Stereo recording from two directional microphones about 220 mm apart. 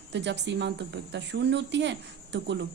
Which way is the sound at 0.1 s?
50° right (ahead or behind).